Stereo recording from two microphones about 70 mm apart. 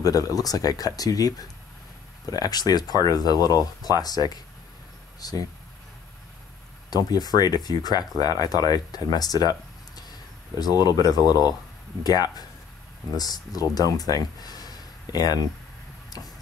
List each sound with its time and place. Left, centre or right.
0.0 s speech: left
7.1 s speech: left